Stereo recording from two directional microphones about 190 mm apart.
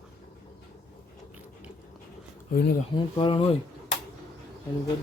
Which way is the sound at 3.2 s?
30° left (ahead or behind).